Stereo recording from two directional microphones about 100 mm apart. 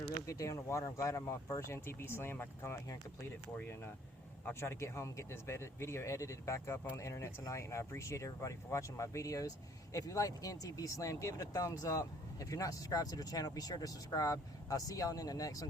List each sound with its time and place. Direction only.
0.3 s speech: 30° left (ahead or behind)